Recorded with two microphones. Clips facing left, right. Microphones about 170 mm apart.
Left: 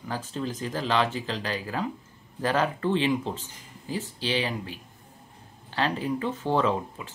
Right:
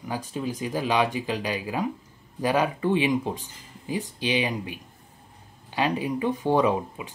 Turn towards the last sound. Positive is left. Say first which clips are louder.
# right 2 dB
turn(degrees=-15)  # may be behind; listen again after turning